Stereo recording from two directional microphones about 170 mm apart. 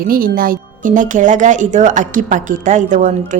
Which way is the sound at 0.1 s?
55° right (ahead or behind).